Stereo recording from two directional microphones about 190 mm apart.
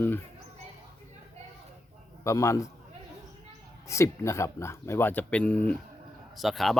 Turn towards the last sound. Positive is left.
turn(degrees=0)  # may be behind; listen again after turning